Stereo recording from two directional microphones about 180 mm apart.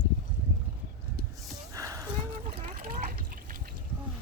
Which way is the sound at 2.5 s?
45° right (ahead or behind).